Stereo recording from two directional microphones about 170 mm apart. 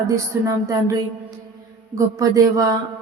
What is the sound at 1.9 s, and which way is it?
Speech, 20° right (ahead or behind).